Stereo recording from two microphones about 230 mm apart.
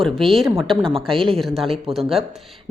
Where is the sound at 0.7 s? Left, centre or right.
Centre.